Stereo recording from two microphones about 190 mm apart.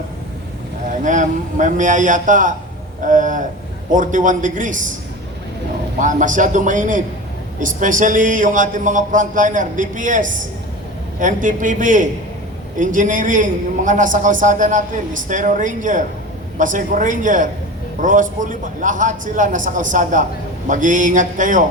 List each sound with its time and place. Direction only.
1.0 s a man's voice: 40° right (ahead or behind)
6.0 s a man's voice: 40° right (ahead or behind)